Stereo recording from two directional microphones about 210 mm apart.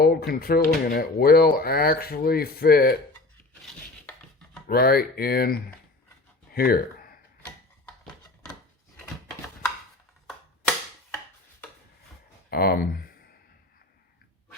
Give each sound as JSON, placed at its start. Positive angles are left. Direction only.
{"t": 0.0, "sound": "speech", "side_deg": 45}
{"t": 4.7, "sound": "speech", "side_deg": 45}
{"t": 6.5, "sound": "a sound", "side_deg": 45}
{"t": 12.5, "sound": "speech", "side_deg": 45}